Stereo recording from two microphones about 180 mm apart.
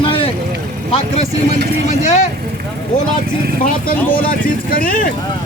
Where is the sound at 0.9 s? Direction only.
35° left (ahead or behind).